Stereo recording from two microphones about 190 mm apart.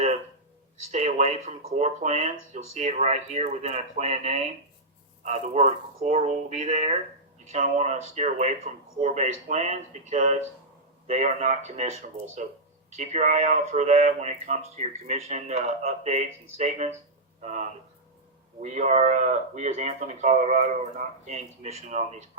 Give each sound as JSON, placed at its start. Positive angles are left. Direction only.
{"t": 0.9, "sound": "speech", "side_deg": -35}